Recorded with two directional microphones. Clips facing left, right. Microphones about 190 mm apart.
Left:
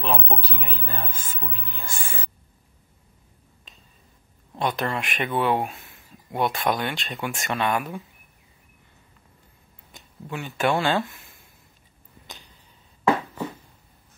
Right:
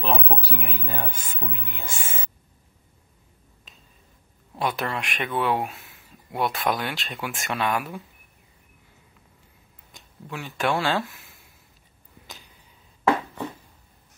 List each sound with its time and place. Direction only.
0.0 s speech: centre (ahead or behind); by 2.0 s 20° right (ahead or behind)
4.6 s speech: 5° right (ahead or behind)
9.9 s speech: centre (ahead or behind)